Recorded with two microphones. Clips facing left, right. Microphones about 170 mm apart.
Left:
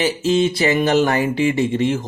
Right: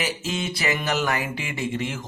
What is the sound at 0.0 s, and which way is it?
Speech, 30° left (ahead or behind).